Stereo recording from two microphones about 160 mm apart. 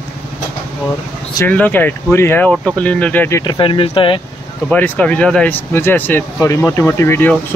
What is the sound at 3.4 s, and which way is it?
Speech, 30° left (ahead or behind).